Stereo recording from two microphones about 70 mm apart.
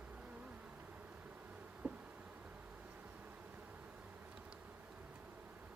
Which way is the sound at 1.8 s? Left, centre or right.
Right.